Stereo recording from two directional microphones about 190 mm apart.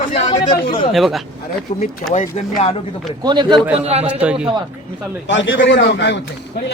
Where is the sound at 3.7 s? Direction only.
35° right (ahead or behind).